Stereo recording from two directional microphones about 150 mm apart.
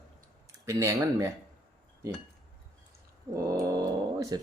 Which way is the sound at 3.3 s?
20° right (ahead or behind).